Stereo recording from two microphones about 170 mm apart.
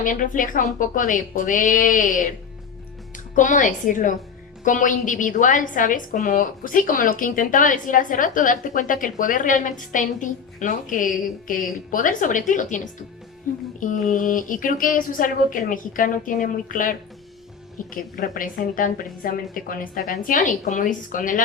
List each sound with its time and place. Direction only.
0.0 s a woman's voice: 50° left (ahead or behind)
3.3 s a woman's voice: 50° left (ahead or behind)